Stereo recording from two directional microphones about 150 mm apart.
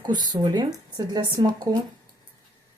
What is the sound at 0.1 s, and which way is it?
Speech, 30° right (ahead or behind).